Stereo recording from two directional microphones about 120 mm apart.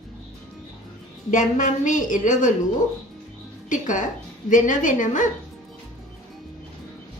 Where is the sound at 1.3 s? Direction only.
90° left.